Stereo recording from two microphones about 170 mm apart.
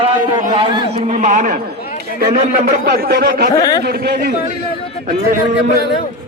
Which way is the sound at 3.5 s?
20° left (ahead or behind).